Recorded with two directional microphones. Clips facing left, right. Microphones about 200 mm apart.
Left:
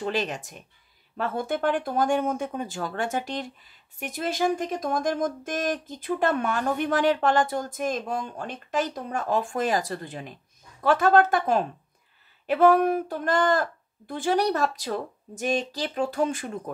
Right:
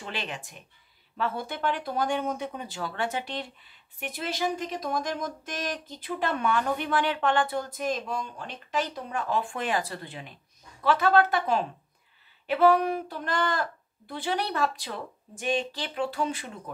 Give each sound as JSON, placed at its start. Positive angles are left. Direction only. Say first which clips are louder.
{"t": 0.0, "sound": "speech", "louder": "left 8 dB", "side_deg": 45}